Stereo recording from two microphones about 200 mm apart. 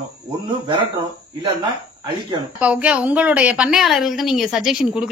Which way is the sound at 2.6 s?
5° right (ahead or behind).